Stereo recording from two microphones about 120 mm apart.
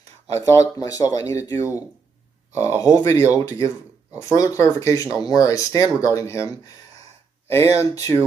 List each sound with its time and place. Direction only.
0.4 s speech: 30° left (ahead or behind)
7.5 s speech: 25° left (ahead or behind)